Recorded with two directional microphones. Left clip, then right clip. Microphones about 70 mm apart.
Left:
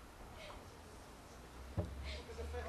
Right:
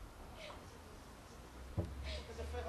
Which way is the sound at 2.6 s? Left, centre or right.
Centre.